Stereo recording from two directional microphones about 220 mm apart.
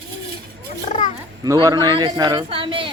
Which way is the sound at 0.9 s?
35° left (ahead or behind).